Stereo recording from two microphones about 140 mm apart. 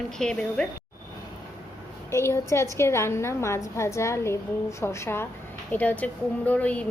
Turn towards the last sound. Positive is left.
turn(degrees=10)  # may be behind; listen again after turning